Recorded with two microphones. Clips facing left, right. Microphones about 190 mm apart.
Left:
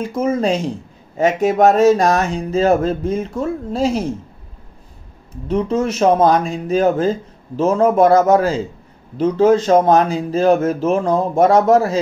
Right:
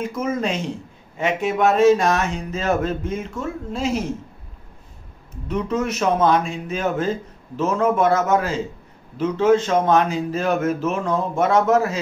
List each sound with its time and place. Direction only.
0.0 s speech: 30° left (ahead or behind)
5.5 s speech: 30° left (ahead or behind)